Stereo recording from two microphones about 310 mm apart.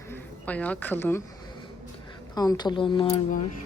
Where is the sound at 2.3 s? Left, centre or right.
Centre.